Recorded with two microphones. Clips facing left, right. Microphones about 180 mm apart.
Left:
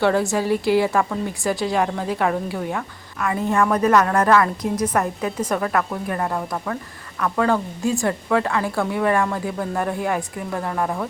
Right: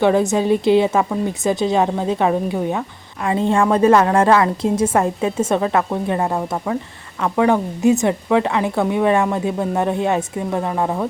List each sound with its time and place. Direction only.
0.0 s speech: 20° right (ahead or behind)